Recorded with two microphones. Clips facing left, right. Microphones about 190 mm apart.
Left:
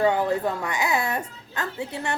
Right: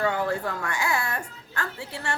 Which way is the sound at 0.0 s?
20° left (ahead or behind).